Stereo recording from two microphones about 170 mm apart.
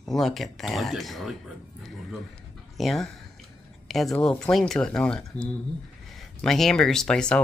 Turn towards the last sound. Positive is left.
turn(degrees=5)  # may be behind; listen again after turning